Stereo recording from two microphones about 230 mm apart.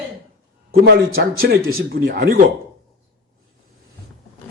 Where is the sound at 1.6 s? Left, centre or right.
Right.